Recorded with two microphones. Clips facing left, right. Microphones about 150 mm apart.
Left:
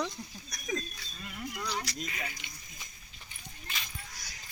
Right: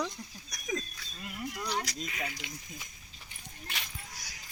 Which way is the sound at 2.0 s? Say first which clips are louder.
Right 1 dB; centre (ahead or behind).